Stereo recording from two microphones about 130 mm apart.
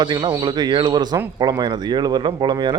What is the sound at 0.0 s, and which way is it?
Speech, 35° right (ahead or behind).